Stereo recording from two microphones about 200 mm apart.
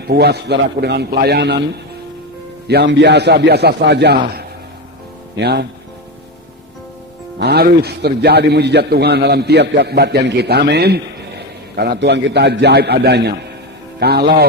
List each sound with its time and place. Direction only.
0.1 s a man's voice: 55° right (ahead or behind)
5.4 s a man's voice: 55° right (ahead or behind)
7.3 s a man's voice: 55° right (ahead or behind)